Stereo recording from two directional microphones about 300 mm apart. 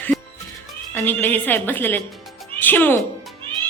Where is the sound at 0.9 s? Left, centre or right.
Centre.